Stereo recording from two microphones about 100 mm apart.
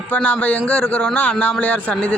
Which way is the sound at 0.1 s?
15° left (ahead or behind).